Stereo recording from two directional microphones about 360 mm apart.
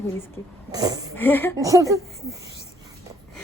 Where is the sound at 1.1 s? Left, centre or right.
Centre.